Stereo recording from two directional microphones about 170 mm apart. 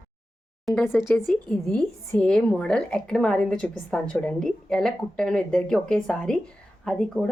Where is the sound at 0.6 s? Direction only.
Centre (ahead or behind).